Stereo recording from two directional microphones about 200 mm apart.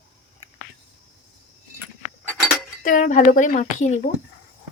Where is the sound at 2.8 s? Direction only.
40° left (ahead or behind).